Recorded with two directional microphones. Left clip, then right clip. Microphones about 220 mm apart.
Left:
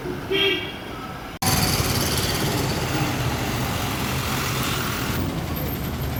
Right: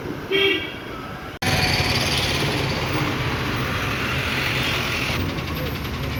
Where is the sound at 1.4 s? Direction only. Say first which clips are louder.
Right 2 dB; 65° left (ahead or behind).